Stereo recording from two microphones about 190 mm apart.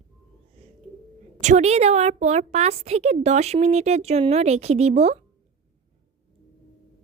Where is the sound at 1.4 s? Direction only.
40° right (ahead or behind).